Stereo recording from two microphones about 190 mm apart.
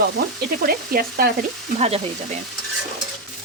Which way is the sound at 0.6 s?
50° right (ahead or behind).